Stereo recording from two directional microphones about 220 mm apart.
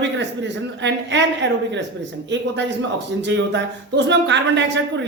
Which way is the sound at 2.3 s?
55° right (ahead or behind).